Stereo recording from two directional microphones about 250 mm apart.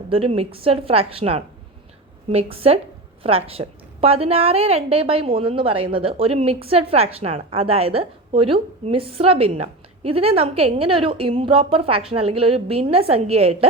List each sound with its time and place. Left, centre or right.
0.1 s a woman's voice: right